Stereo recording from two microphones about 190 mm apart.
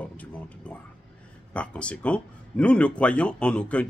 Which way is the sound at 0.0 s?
5° left (ahead or behind).